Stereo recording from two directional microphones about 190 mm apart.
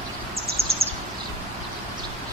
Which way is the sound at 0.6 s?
30° right (ahead or behind).